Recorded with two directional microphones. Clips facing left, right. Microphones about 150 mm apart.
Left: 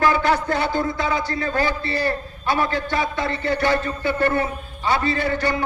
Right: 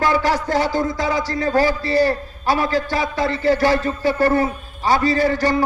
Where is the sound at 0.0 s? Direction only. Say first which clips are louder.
Even; 35° right (ahead or behind).